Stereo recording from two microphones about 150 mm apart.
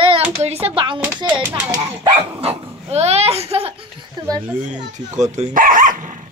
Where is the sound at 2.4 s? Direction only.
40° right (ahead or behind).